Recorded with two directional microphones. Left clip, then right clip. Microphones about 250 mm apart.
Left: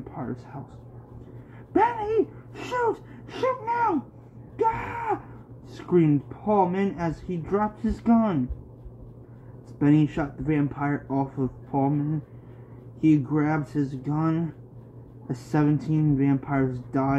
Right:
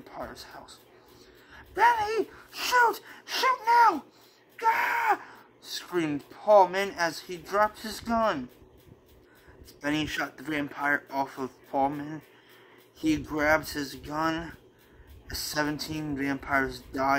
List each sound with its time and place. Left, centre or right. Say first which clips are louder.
1.8 s speech: left 1 dB; centre
9.8 s speech: left 6 dB; centre
13.0 s speech: left 4 dB; centre